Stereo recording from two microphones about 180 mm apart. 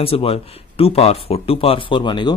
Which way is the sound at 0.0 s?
30° left (ahead or behind).